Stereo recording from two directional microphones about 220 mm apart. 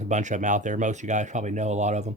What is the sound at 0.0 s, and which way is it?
Speech, 35° right (ahead or behind).